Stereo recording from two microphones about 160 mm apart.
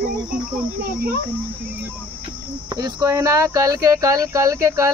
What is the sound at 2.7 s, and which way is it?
Speech, 25° right (ahead or behind).